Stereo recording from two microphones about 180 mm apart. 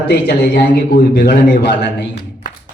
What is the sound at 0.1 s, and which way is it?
Speech, 65° left (ahead or behind).